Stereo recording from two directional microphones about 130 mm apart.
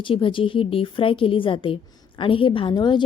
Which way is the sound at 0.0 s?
40° left (ahead or behind).